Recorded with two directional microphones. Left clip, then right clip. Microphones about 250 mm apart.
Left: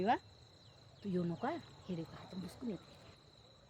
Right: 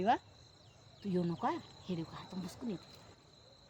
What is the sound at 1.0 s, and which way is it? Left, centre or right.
Speech, right.